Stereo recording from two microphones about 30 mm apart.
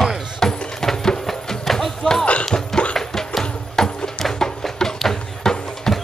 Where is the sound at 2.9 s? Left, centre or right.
Centre.